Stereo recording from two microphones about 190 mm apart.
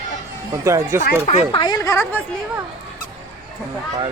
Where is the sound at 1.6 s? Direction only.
20° left (ahead or behind).